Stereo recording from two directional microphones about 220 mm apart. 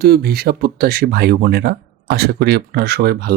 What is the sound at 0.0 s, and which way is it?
Speech, 45° right (ahead or behind).